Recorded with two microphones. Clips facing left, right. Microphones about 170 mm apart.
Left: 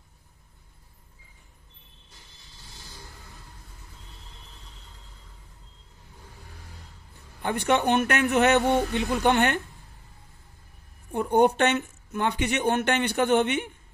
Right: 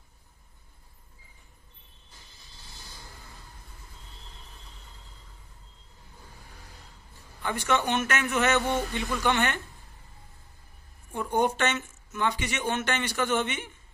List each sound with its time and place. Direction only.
7.4 s speech: 55° left (ahead or behind)
11.1 s speech: 60° left (ahead or behind)